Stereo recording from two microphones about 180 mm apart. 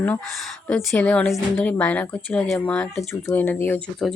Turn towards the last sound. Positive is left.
turn(degrees=10)  # may be behind; listen again after turning